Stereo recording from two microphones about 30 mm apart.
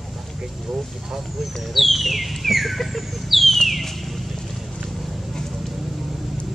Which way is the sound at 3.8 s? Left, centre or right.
Centre.